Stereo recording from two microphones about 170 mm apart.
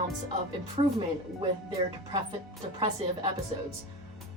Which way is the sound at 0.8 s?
30° right (ahead or behind).